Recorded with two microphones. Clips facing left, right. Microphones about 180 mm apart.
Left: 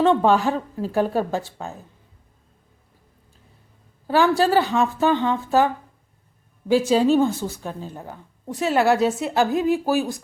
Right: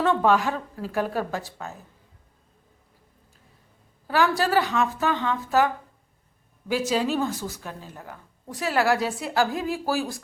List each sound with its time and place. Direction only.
0.0 s a woman's voice: 25° left (ahead or behind)
4.0 s a woman's voice: 30° left (ahead or behind)